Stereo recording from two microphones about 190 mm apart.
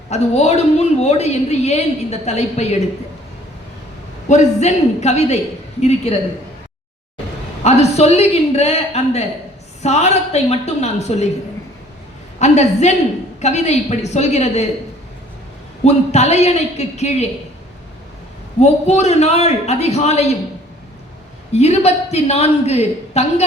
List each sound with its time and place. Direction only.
0.1 s a woman's voice: 35° left (ahead or behind)
4.3 s a woman's voice: 35° left (ahead or behind)
7.6 s a woman's voice: 35° left (ahead or behind)
12.4 s a woman's voice: 35° left (ahead or behind)
15.8 s a woman's voice: 35° left (ahead or behind)
18.6 s a woman's voice: 35° left (ahead or behind)
21.5 s a woman's voice: 35° left (ahead or behind)